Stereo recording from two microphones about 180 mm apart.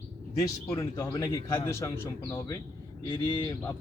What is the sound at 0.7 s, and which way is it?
Speech, 15° left (ahead or behind).